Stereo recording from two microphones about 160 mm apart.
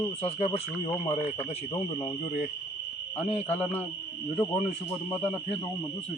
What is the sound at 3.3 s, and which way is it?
Speech, 40° left (ahead or behind).